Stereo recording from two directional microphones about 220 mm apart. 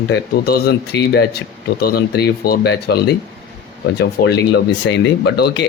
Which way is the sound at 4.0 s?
50° left (ahead or behind).